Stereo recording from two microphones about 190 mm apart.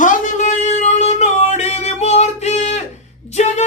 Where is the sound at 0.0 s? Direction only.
45° left (ahead or behind).